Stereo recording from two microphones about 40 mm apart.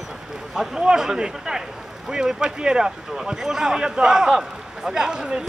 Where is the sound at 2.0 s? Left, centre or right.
Centre.